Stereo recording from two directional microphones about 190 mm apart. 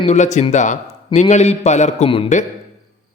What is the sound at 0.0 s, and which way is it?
A man's voice, 35° left (ahead or behind).